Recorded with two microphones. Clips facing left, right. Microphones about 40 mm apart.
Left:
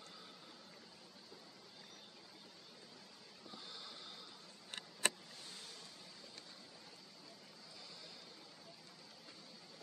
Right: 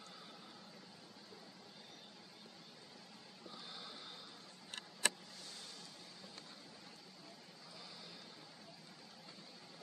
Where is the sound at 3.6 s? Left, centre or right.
Centre.